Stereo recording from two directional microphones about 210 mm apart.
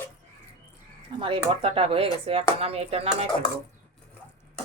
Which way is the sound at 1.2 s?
25° right (ahead or behind).